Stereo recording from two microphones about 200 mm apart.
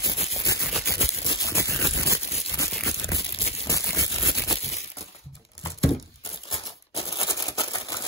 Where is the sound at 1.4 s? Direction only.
15° left (ahead or behind).